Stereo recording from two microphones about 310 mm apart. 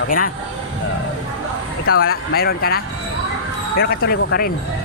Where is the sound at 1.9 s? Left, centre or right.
Left.